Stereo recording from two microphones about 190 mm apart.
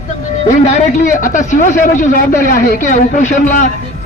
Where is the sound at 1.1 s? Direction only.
45° left (ahead or behind).